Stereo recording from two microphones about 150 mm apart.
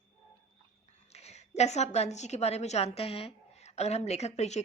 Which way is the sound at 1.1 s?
45° left (ahead or behind).